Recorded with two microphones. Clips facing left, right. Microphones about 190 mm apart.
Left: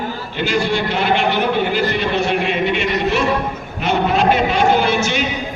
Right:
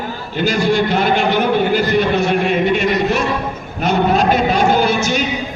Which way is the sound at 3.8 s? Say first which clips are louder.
Right 2 dB; 40° right (ahead or behind).